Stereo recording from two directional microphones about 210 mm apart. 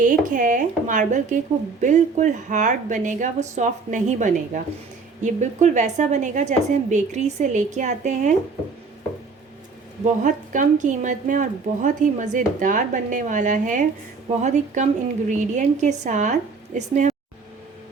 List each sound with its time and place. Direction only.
0.0 s a woman's voice: 40° right (ahead or behind)
10.2 s a woman's voice: 35° right (ahead or behind)